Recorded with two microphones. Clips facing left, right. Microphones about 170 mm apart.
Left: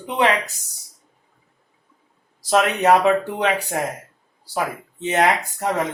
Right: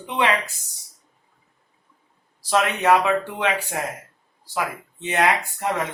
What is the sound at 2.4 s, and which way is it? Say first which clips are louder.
Speech: left 3 dB; 35° left (ahead or behind).